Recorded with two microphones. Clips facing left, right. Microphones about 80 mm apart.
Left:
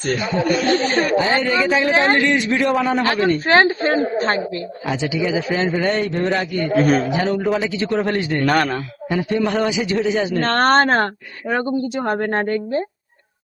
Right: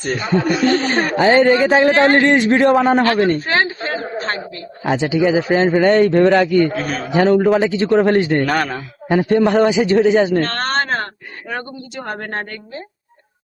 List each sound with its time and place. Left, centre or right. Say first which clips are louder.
0.3 s a man's voice: right 3 dB; right
1.9 s a man's voice: right 4 dB; centre
2.1 s a man's voice: right 5 dB; right
3.4 s speech: left 4 dB; left
4.9 s a man's voice: right 6 dB; right
8.4 s a man's voice: left 1 dB; centre
9.0 s a man's voice: right 6 dB; right
10.4 s speech: left 5 dB; left
11.5 s speech: left 8 dB; centre